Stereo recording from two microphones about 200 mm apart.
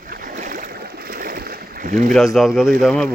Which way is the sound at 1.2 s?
50° right (ahead or behind).